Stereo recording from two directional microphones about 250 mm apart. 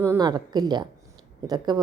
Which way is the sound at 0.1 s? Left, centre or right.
Centre.